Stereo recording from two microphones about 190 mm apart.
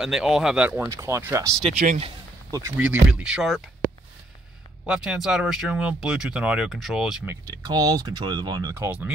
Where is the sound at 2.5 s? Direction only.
10° right (ahead or behind).